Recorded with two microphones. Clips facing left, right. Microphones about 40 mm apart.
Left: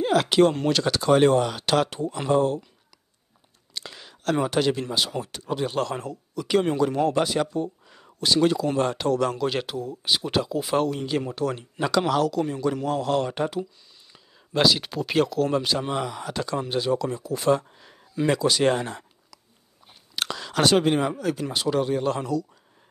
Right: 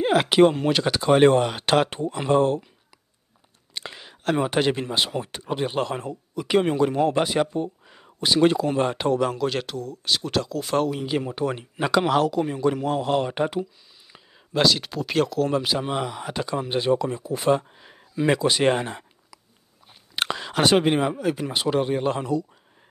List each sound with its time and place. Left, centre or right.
0.0 s speech: right
3.7 s speech: right
8.4 s speech: right
9.2 s speech: centre
10.9 s speech: centre
14.5 s speech: centre; by 22.5 s right